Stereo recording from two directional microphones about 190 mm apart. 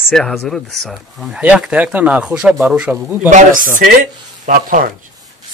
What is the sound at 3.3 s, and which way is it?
A man's voice, 45° right (ahead or behind).